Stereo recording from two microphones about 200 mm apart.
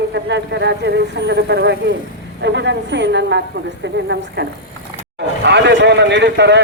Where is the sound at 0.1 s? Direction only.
60° right (ahead or behind).